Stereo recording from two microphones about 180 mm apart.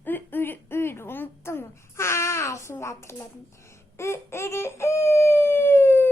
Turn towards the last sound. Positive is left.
turn(degrees=15)  # may be behind; listen again after turning